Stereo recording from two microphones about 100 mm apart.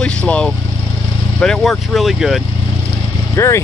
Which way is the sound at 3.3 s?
25° left (ahead or behind).